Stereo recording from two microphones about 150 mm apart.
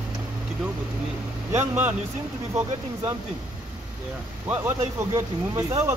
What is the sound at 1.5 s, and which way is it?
Speech, 15° right (ahead or behind).